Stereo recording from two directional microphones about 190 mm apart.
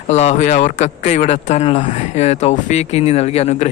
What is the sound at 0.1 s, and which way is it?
Speech, 35° left (ahead or behind).